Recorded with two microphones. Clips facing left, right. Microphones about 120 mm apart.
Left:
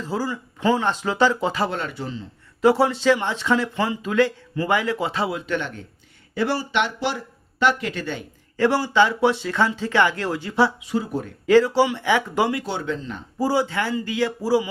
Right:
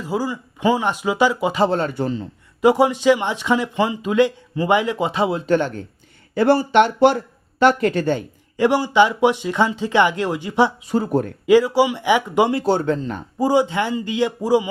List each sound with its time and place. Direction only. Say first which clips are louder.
0.0 s speech: right 3 dB; 15° right (ahead or behind)
1.6 s a man's voice: right 7 dB; 35° right (ahead or behind)
2.0 s speech: right 8 dB; 50° right (ahead or behind)
2.6 s speech: right 2 dB; 15° right (ahead or behind)
5.4 s a man's voice: right 8 dB; 40° right (ahead or behind)
6.3 s speech: right 8 dB; 50° right (ahead or behind)
8.5 s speech: right 3 dB; 15° right (ahead or behind)
10.8 s speech: right 6 dB; 45° right (ahead or behind)
11.4 s speech: right 1 dB; 15° right (ahead or behind)
12.5 s speech: right 8 dB; 40° right (ahead or behind)
13.4 s a man's voice: right 4 dB; 20° right (ahead or behind)